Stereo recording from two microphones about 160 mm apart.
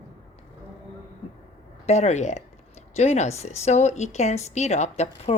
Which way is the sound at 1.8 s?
45° left (ahead or behind).